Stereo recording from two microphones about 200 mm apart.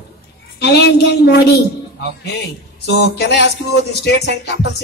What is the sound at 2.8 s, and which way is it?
A man's voice, 55° left (ahead or behind).